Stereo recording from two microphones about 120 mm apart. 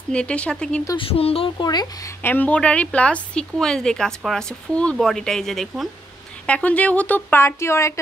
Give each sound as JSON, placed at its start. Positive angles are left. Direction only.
{"t": 0.1, "sound": "a woman's voice", "side_deg": 10}
{"t": 0.9, "sound": "speech", "side_deg": 50}
{"t": 1.6, "sound": "speech", "side_deg": 35}
{"t": 2.2, "sound": "a woman's voice", "side_deg": 15}